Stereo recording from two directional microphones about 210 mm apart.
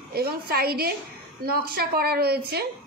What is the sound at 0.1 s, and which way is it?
A woman's voice, 45° right (ahead or behind).